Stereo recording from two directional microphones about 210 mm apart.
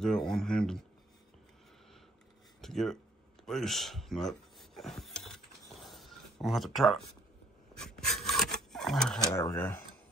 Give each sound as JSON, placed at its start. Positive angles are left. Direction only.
{"t": 0.0, "sound": "speech", "side_deg": 0}
{"t": 2.6, "sound": "speech", "side_deg": 0}
{"t": 3.4, "sound": "a sound", "side_deg": 0}
{"t": 7.7, "sound": "rub", "side_deg": 5}
{"t": 9.3, "sound": "speech", "side_deg": 15}